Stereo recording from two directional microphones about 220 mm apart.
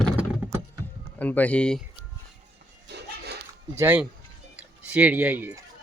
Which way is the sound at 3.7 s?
10° right (ahead or behind).